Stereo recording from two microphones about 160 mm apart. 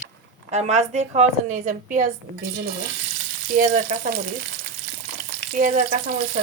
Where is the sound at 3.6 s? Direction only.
55° right (ahead or behind).